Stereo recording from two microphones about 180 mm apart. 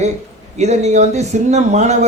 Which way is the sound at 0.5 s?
40° right (ahead or behind).